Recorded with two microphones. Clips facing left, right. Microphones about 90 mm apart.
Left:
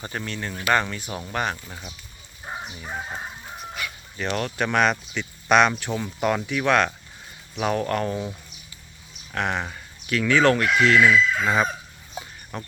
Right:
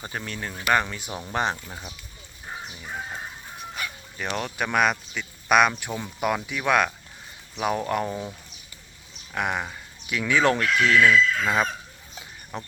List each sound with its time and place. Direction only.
0.0 s speech: 5° right (ahead or behind)
2.5 s chicken: 20° left (ahead or behind)
4.2 s speech: 10° right (ahead or behind)
9.3 s speech: 10° right (ahead or behind)
10.9 s chicken: 10° left (ahead or behind)
12.5 s speech: 15° right (ahead or behind)